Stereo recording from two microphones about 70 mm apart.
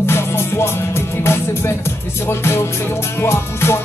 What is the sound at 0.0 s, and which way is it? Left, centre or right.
Music, left.